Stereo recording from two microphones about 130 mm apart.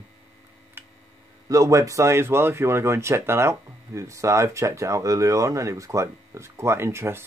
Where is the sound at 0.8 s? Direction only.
15° right (ahead or behind).